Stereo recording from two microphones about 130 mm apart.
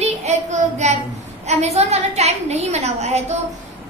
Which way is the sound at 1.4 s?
55° right (ahead or behind).